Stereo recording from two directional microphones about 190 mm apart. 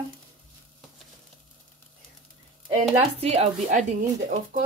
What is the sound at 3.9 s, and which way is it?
Speech, 45° right (ahead or behind).